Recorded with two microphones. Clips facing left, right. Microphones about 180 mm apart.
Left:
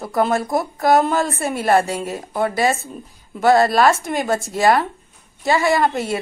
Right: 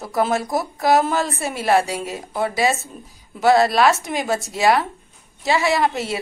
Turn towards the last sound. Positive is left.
turn(degrees=0)  # may be behind; listen again after turning